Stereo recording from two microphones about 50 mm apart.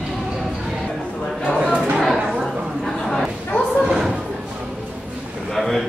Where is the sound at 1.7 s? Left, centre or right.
Right.